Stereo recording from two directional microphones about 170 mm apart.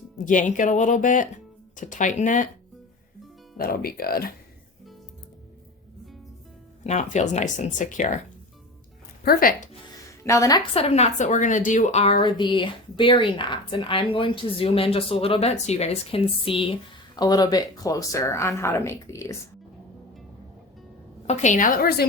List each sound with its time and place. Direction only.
0.3 s speech: 50° left (ahead or behind)
3.6 s speech: 60° left (ahead or behind)
6.8 s speech: 45° left (ahead or behind)
9.2 s speech: 60° left (ahead or behind)
10.2 s speech: 20° left (ahead or behind)
10.8 s a woman's voice: 40° left (ahead or behind)
17.2 s speech: 20° left (ahead or behind)
21.2 s speech: 45° left (ahead or behind); by 22.0 s 60° left (ahead or behind)